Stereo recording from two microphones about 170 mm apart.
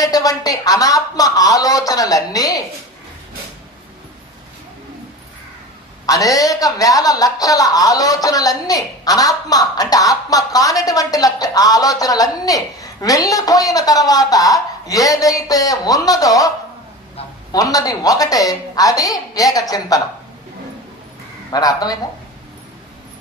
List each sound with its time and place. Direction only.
0.0 s a woman's voice: 20° left (ahead or behind)
6.0 s a woman's voice: 20° left (ahead or behind)
21.5 s a woman's voice: 20° left (ahead or behind)